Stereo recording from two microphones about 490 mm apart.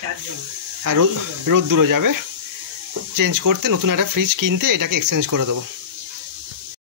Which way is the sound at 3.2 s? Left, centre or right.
Right.